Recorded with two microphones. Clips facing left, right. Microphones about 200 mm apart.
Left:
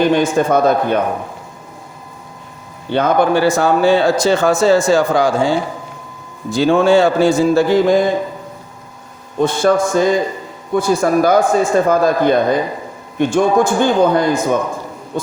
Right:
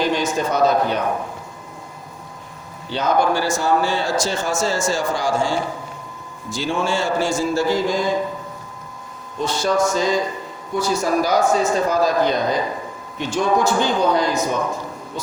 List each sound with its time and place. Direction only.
0.0 s speech: 55° left (ahead or behind)
2.9 s speech: 55° left (ahead or behind)
9.4 s speech: 55° left (ahead or behind)